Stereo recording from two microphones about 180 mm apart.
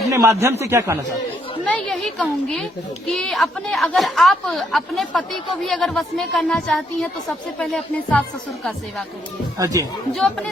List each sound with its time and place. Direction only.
0.1 s a man's voice: 15° right (ahead or behind)
1.6 s speech: 5° left (ahead or behind)
9.6 s speech: 20° right (ahead or behind)
10.1 s speech: centre (ahead or behind)